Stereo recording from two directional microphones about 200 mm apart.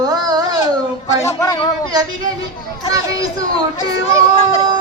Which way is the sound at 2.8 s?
20° right (ahead or behind).